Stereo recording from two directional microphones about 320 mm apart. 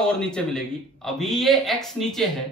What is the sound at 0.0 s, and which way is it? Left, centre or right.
Speech, centre.